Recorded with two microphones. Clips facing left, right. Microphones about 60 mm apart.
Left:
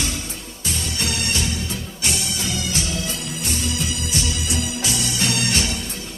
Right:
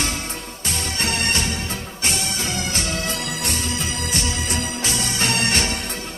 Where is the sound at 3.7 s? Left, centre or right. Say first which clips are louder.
Even; right.